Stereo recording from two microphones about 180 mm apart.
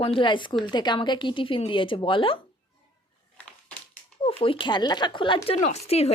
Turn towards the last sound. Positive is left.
turn(degrees=35)  # may be behind; listen again after turning